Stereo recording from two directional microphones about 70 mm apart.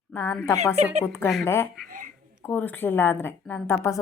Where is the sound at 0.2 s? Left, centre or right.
Left.